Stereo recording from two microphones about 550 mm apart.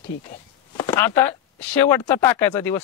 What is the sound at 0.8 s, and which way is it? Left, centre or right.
Speech, centre.